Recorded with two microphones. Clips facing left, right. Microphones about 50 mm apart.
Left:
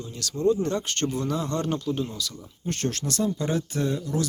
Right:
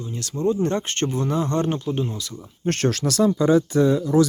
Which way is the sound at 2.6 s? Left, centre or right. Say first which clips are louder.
Right 7 dB; right.